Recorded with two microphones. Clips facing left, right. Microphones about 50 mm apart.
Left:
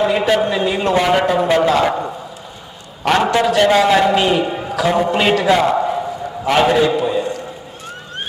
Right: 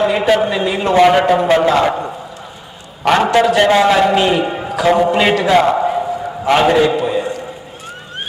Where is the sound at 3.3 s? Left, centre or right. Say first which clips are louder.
Right 3 dB; centre.